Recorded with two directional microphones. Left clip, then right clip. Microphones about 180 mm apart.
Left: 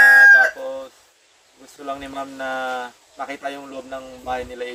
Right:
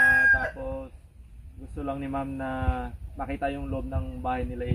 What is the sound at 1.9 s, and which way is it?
Speech, 15° left (ahead or behind).